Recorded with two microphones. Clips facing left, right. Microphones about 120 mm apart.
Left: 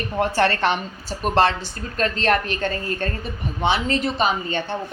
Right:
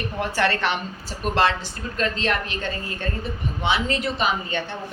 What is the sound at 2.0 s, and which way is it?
A woman's voice, 45° left (ahead or behind).